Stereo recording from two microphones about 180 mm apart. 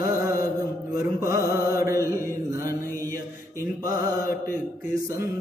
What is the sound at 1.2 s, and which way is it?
Mantra, 15° right (ahead or behind).